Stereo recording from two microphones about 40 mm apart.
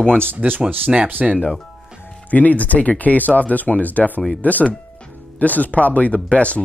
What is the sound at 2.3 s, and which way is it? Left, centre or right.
Speech, left.